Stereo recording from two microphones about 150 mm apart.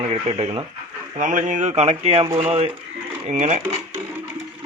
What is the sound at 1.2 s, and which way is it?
Speech, 60° right (ahead or behind).